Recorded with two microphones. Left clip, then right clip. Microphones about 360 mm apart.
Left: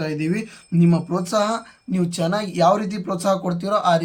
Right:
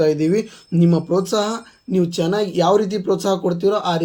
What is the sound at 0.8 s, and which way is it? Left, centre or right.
Speech, centre.